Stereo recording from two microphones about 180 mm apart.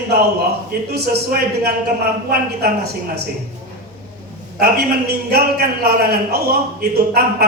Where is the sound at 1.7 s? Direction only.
60° right (ahead or behind).